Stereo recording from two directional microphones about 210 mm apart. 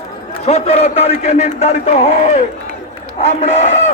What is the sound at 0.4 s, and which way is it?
A man's voice, 30° left (ahead or behind).